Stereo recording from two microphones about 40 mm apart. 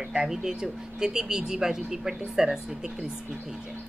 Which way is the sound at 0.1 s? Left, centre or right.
Centre.